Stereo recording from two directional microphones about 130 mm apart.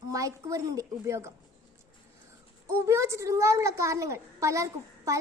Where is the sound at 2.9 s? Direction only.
20° right (ahead or behind).